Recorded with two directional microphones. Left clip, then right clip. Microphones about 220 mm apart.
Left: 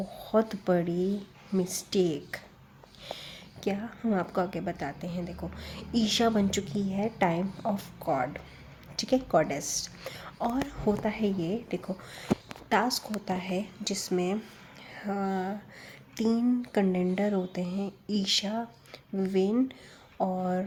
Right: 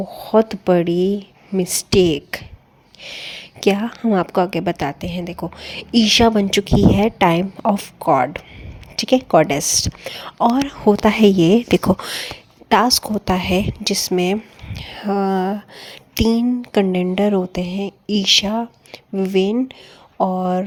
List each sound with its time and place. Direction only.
0.1 s a woman's voice: 30° right (ahead or behind)
11.1 s a woman's voice: 45° right (ahead or behind); by 20.7 s 30° right (ahead or behind)